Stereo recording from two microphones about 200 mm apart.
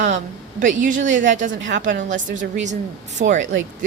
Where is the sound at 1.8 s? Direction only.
40° right (ahead or behind).